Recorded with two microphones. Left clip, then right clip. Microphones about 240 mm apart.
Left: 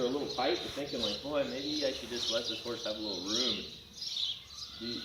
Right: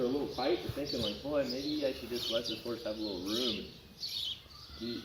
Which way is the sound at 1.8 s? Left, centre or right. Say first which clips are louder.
Left 1 dB; left.